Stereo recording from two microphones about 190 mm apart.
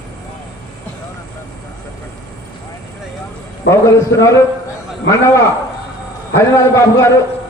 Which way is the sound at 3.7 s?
15° left (ahead or behind).